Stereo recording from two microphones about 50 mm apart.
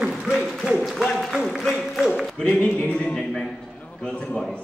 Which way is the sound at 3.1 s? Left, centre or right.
Centre.